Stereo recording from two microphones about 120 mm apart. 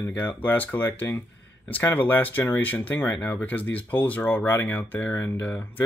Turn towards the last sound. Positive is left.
turn(degrees=15)  # may be behind; listen again after turning